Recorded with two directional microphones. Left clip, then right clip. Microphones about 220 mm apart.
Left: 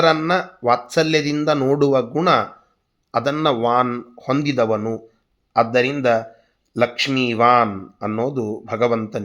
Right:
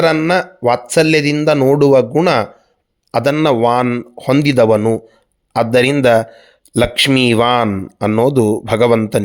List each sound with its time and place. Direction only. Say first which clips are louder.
0.0 s speech: right 4 dB; 40° right (ahead or behind)